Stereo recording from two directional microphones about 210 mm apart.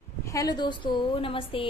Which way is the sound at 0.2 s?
15° left (ahead or behind).